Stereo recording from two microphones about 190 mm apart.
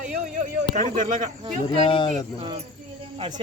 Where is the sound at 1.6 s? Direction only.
30° left (ahead or behind).